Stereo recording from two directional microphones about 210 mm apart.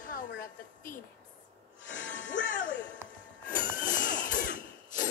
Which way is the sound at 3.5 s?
40° left (ahead or behind).